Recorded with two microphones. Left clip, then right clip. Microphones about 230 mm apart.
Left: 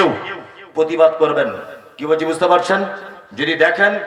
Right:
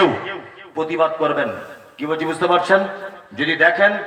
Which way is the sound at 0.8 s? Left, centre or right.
Left.